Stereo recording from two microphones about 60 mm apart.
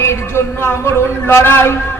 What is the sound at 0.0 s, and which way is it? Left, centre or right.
A man's voice, left.